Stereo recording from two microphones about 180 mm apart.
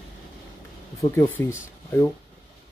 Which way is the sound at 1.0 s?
15° left (ahead or behind).